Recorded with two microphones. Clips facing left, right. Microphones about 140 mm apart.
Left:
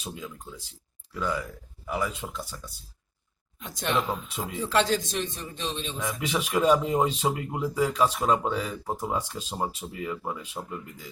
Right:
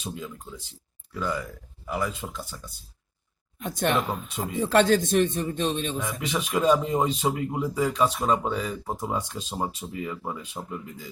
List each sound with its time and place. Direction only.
0.0 s speech: 5° left (ahead or behind)
3.6 s speech: 55° right (ahead or behind)
6.0 s speech: centre (ahead or behind)